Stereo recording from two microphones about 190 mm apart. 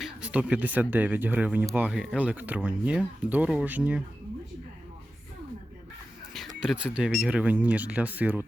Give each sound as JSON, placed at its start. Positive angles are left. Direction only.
{"t": 0.0, "sound": "speech", "side_deg": -5}
{"t": 6.6, "sound": "speech", "side_deg": -5}